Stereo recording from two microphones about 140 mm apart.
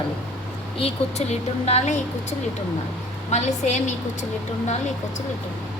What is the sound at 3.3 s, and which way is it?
Speech, 55° left (ahead or behind).